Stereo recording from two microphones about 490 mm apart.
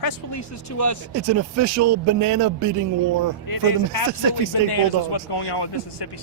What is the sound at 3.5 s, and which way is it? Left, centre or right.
Speech, left.